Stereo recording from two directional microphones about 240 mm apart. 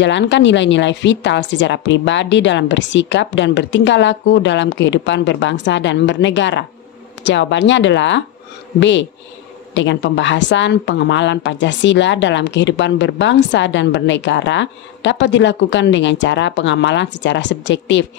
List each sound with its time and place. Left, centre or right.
0.0 s a woman's voice: left